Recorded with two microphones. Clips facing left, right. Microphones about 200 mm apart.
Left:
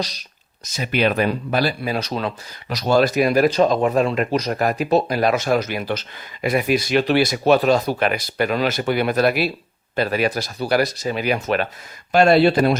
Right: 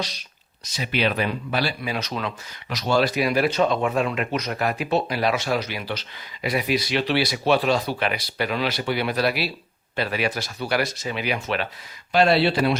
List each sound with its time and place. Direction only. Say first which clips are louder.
0.7 s speech: left 4 dB; 50° left (ahead or behind)